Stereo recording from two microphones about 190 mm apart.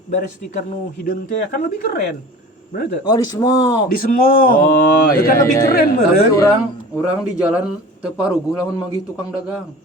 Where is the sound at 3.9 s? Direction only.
50° left (ahead or behind).